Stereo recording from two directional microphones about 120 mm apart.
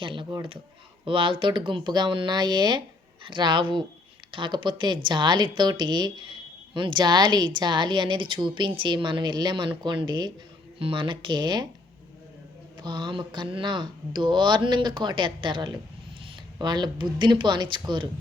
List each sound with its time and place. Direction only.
0.0 s a woman's voice: 45° right (ahead or behind)
12.8 s a woman's voice: 40° right (ahead or behind)